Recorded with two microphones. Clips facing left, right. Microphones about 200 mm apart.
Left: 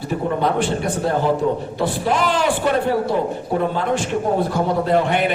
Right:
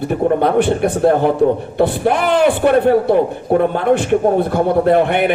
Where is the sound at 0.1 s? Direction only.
60° right (ahead or behind).